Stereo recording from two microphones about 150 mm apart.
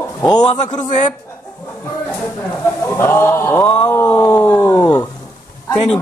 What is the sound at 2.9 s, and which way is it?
Speech, 15° left (ahead or behind).